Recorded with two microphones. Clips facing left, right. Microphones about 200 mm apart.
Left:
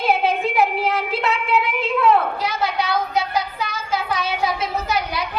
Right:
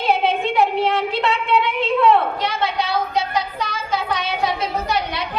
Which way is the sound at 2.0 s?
Centre (ahead or behind).